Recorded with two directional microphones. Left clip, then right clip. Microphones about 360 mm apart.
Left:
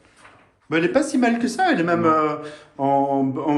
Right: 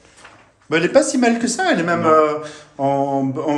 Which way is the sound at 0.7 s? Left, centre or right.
Centre.